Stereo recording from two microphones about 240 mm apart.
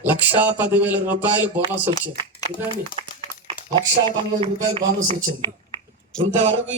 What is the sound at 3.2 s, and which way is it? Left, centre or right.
Speech, right.